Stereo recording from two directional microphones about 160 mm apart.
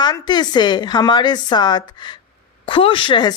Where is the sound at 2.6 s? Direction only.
35° left (ahead or behind).